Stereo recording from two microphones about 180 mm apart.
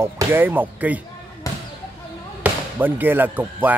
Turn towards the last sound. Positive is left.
turn(degrees=-10)  # may be behind; listen again after turning